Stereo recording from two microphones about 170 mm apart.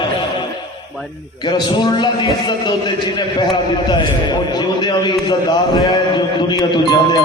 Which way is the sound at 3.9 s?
25° left (ahead or behind).